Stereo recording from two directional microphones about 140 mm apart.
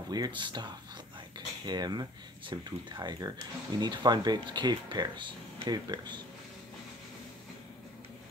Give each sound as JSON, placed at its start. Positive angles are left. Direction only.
{"t": 0.1, "sound": "speech", "side_deg": -30}
{"t": 1.7, "sound": "speech", "side_deg": -30}